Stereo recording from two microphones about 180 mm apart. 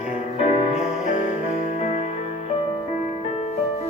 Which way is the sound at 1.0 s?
45° left (ahead or behind).